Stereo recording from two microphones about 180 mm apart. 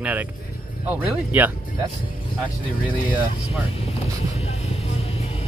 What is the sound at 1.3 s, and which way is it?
Speech, 10° right (ahead or behind).